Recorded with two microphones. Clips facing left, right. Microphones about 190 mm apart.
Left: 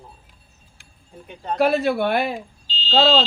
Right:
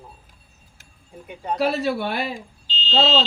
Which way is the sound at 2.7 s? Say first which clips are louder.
Even; 35° left (ahead or behind).